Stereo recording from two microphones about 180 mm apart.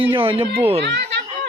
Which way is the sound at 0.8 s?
70° right (ahead or behind).